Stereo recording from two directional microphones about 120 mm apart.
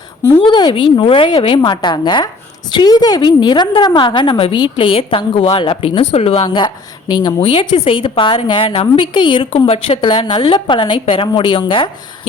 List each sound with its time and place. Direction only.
0.3 s a woman's voice: 40° left (ahead or behind)